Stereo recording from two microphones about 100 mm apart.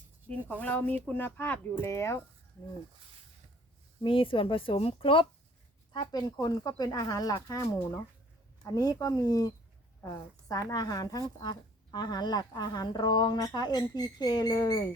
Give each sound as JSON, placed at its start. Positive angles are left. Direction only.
{"t": 0.6, "sound": "speech", "side_deg": 15}
{"t": 4.0, "sound": "speech", "side_deg": 60}
{"t": 5.9, "sound": "a woman's voice", "side_deg": 45}
{"t": 11.3, "sound": "a woman's voice", "side_deg": 50}